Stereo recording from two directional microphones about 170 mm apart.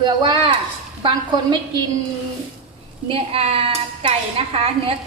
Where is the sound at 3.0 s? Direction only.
35° right (ahead or behind).